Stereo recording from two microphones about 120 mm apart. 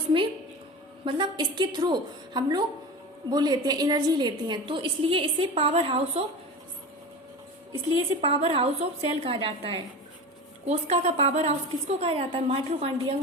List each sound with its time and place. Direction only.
0.1 s a sound: 50° right (ahead or behind)
1.0 s a woman's voice: 40° right (ahead or behind)
7.9 s a woman's voice: 50° right (ahead or behind)
10.7 s a woman's voice: 60° right (ahead or behind)